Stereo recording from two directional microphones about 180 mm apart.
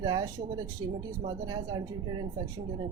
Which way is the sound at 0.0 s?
20° right (ahead or behind).